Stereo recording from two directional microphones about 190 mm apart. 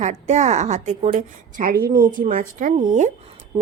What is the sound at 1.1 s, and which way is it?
A woman's voice, 50° right (ahead or behind).